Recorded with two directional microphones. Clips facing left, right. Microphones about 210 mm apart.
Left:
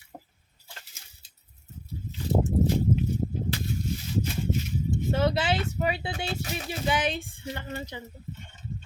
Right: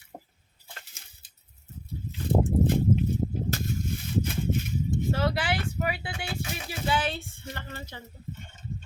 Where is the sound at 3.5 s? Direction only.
45° right (ahead or behind).